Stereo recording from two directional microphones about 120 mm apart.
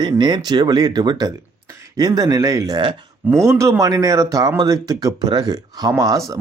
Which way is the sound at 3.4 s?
25° right (ahead or behind).